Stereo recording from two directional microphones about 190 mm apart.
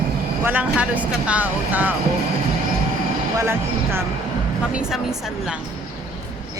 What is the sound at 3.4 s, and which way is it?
Speech, 15° right (ahead or behind).